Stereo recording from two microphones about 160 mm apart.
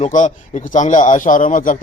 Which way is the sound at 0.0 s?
50° left (ahead or behind).